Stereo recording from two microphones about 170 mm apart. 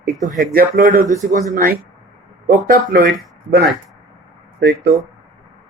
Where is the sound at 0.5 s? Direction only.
55° right (ahead or behind).